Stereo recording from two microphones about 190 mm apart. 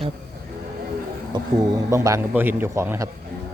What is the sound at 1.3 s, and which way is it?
A man's voice, 25° right (ahead or behind).